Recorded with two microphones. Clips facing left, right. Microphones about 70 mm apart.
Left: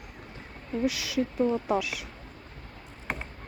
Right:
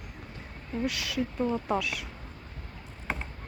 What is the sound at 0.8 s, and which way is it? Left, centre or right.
Speech, centre.